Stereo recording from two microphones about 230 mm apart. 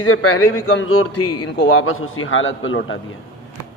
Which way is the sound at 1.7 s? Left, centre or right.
Left.